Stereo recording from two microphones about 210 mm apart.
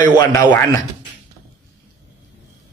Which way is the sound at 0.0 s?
20° left (ahead or behind).